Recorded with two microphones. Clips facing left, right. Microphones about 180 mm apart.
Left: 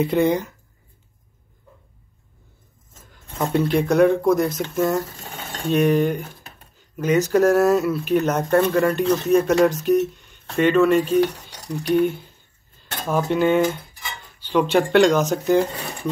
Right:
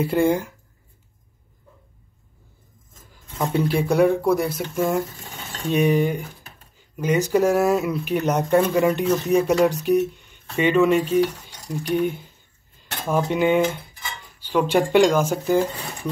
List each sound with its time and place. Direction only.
0.0 s speech: 5° right (ahead or behind)
3.1 s speech: 10° right (ahead or behind)
11.1 s stir: 70° left (ahead or behind)
11.9 s speech: 10° right (ahead or behind)